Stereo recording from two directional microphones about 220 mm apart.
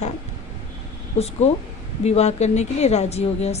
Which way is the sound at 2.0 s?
30° left (ahead or behind).